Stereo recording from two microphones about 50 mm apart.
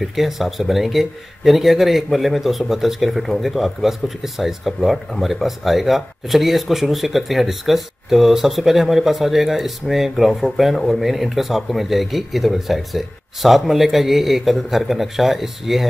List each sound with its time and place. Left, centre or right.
0.1 s speech: centre